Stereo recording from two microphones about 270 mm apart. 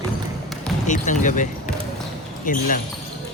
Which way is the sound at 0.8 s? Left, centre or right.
Left.